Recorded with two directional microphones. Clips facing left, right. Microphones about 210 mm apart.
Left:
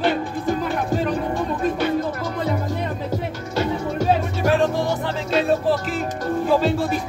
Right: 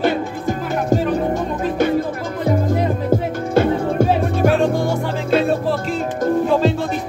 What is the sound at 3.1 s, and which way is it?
Music, 55° right (ahead or behind).